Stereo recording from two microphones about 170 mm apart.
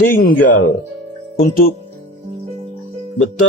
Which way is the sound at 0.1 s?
55° left (ahead or behind).